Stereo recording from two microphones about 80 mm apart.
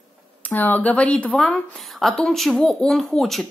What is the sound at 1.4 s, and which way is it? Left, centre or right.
A woman's voice, centre.